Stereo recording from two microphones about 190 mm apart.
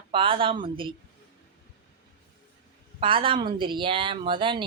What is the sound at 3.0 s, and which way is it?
Speech, 30° right (ahead or behind).